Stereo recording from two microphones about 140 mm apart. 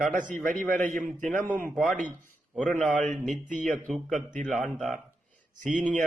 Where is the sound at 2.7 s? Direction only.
10° left (ahead or behind).